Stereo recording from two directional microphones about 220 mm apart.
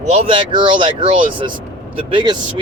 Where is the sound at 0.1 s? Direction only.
25° right (ahead or behind).